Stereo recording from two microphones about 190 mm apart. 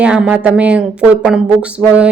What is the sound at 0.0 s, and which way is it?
Speech, 5° right (ahead or behind).